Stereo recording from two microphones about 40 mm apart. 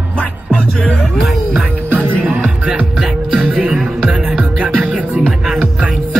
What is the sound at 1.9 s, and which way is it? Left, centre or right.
Music, right.